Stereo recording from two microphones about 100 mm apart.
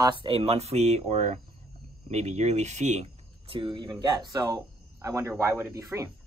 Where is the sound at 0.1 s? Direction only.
60° right (ahead or behind); by 1.0 s 90° right.